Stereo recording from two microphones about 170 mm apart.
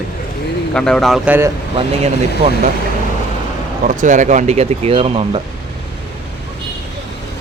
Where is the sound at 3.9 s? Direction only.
50° right (ahead or behind).